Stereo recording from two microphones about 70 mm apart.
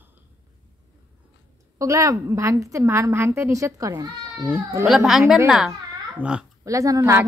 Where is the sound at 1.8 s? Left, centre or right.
Right.